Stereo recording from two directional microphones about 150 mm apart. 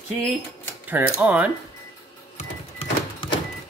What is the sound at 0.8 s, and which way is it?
Speech, 15° right (ahead or behind).